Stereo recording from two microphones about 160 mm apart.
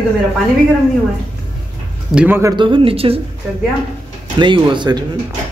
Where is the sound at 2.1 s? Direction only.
5° right (ahead or behind).